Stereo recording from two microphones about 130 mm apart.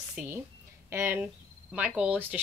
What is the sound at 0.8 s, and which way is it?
Speech, 20° right (ahead or behind).